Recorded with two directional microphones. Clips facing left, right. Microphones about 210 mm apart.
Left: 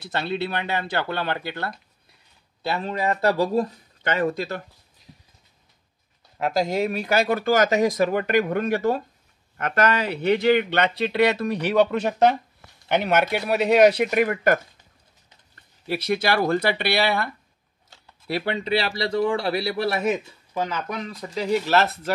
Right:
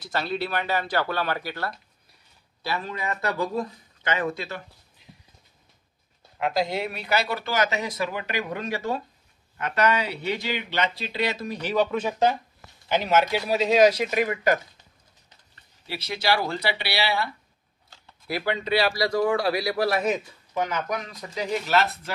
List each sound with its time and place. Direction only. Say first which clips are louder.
0.1 s speech: left 1 dB; 25° left (ahead or behind); by 4.6 s 40° left (ahead or behind)
6.3 s speech: left 3 dB; 40° left (ahead or behind)
18.2 s speech: left 2 dB; 30° left (ahead or behind)